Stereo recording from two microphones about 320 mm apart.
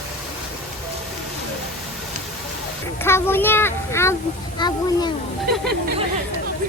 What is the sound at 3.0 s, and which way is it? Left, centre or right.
Speech, centre.